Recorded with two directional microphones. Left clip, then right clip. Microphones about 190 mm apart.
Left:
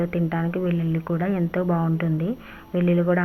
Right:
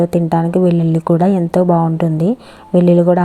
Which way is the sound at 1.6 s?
25° right (ahead or behind).